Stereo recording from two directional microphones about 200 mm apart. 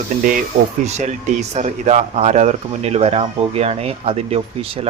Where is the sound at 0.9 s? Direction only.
35° right (ahead or behind).